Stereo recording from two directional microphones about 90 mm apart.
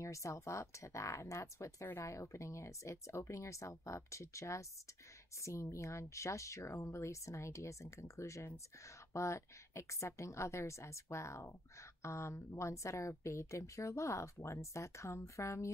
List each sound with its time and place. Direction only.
0.0 s speech: 35° left (ahead or behind)